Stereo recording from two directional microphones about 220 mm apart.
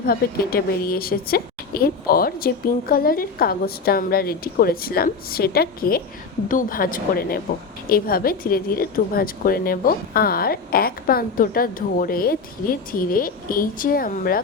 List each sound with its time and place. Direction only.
0.0 s a woman's voice: 40° left (ahead or behind)